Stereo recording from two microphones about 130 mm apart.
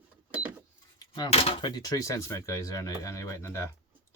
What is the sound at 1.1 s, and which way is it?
Speech, 50° left (ahead or behind).